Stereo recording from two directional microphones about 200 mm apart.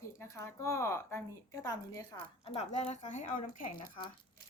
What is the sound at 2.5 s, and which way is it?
Speech, 30° left (ahead or behind).